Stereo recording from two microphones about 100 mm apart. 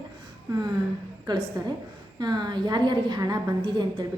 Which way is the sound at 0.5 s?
45° right (ahead or behind).